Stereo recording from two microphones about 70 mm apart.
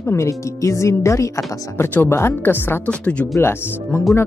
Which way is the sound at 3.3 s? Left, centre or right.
Left.